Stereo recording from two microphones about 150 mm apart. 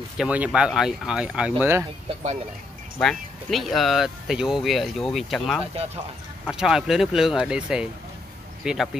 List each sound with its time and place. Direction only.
0.2 s speech: 10° right (ahead or behind)
3.0 s speech: 5° left (ahead or behind)